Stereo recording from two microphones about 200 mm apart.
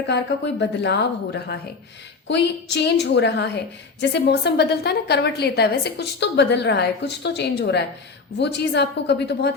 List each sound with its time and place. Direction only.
0.1 s a woman's voice: 60° left (ahead or behind)